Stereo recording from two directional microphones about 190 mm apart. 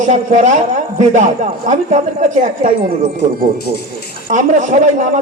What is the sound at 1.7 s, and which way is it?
A man's voice, 40° right (ahead or behind).